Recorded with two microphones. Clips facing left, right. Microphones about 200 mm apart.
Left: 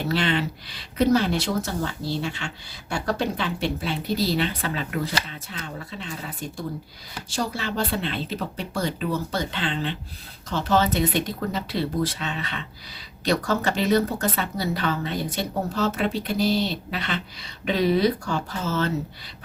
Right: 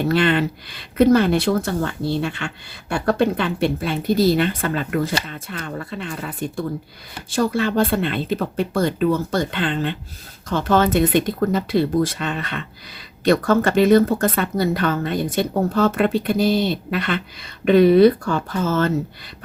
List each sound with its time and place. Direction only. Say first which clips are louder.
0.0 s speech: right 6 dB; 55° right (ahead or behind)